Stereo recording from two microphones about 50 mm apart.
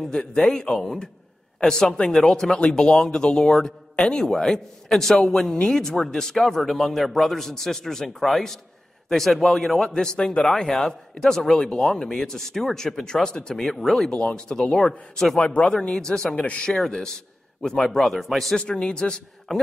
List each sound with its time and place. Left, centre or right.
0.0 s speech: centre
9.8 s speech: centre
14.1 s speech: centre
15.4 s speech: left
15.7 s speech: centre
16.3 s speech: left
16.6 s speech: centre
18.6 s speech: centre